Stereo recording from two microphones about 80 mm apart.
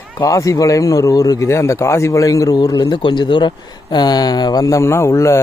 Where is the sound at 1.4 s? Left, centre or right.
Left.